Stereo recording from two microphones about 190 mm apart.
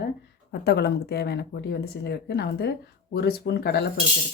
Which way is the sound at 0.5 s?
60° left (ahead or behind).